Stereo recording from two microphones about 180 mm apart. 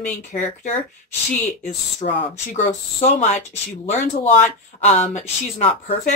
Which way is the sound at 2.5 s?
40° left (ahead or behind).